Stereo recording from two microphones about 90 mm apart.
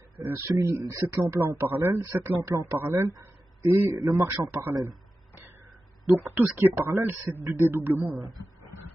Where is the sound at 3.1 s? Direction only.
40° right (ahead or behind).